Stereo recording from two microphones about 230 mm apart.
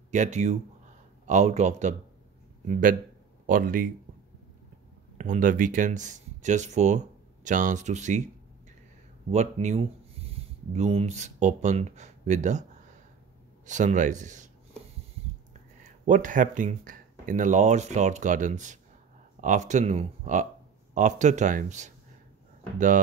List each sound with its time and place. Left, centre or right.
0.1 s speech: right
5.1 s speech: right
9.3 s speech: right
13.7 s speech: right
15.8 s speech: right